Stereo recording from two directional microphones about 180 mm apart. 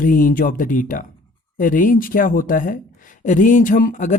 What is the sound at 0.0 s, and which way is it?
Speech, 50° left (ahead or behind).